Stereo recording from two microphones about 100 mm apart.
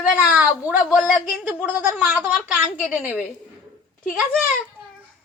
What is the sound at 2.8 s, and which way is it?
Speech, 15° right (ahead or behind).